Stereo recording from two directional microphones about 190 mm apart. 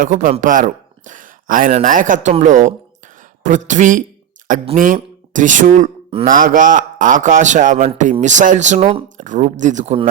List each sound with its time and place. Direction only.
0.0 s speech: 45° right (ahead or behind)